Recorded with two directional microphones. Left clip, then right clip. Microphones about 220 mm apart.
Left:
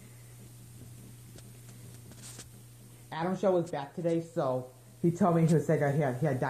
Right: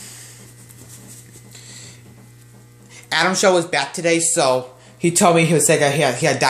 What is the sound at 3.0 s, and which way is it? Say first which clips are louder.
Speech: right 15 dB; 45° right (ahead or behind).